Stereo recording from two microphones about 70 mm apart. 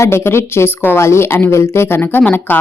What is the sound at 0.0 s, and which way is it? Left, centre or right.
Speech, left.